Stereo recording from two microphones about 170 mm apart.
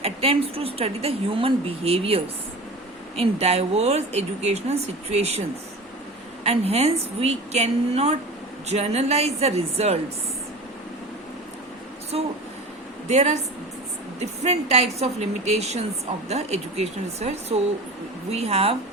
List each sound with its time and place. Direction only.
0.0 s a woman's voice: 35° right (ahead or behind)
6.4 s a woman's voice: 40° right (ahead or behind)
12.1 s a woman's voice: 35° right (ahead or behind)
14.4 s a woman's voice: 40° right (ahead or behind)